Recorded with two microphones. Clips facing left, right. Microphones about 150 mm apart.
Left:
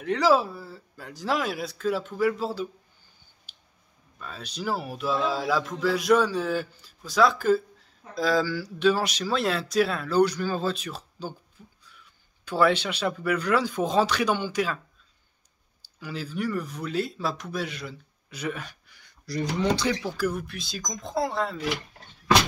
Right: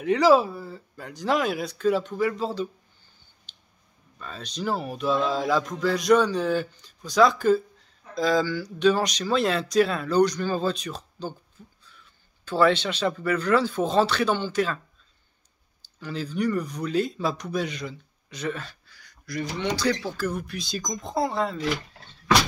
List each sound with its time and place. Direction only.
0.0 s speech: centre (ahead or behind)
3.5 s a sound: 10° left (ahead or behind)
4.2 s speech: 5° left (ahead or behind)
15.8 s speech: 10° left (ahead or behind)
19.2 s speech: 35° left (ahead or behind)
20.0 s speech: 5° left (ahead or behind)